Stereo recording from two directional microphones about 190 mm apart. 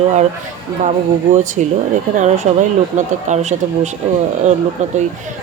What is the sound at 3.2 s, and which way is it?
Speech, 40° right (ahead or behind).